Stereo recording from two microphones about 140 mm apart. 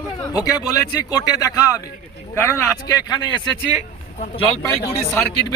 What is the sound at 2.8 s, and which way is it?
Speech, 30° left (ahead or behind).